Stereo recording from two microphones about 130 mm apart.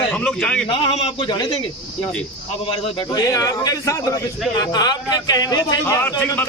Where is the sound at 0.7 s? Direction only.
40° left (ahead or behind).